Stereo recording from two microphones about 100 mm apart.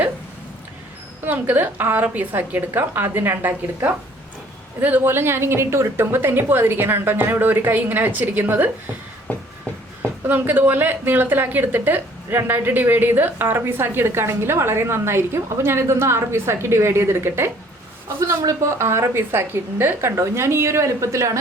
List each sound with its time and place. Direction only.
1.2 s a woman's voice: 20° right (ahead or behind)
9.3 s a sound: 20° left (ahead or behind)
10.0 s a woman's voice: 20° right (ahead or behind)